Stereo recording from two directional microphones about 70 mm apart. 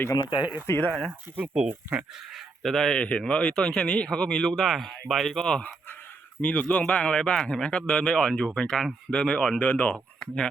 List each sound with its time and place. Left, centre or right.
0.1 s speech: left
0.9 s speech: centre
2.3 s speech: centre
6.4 s speech: centre